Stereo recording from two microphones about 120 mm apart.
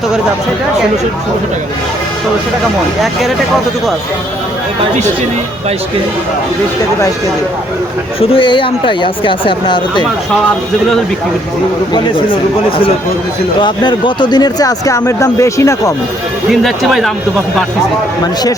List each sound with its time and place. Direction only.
3.0 s speech: centre (ahead or behind)
8.2 s speech: 50° left (ahead or behind)
11.9 s speech: 45° left (ahead or behind); by 15.9 s 25° left (ahead or behind)
16.5 s speech: centre (ahead or behind)